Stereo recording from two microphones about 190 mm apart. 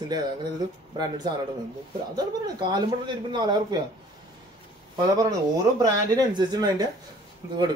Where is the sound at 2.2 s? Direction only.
20° right (ahead or behind).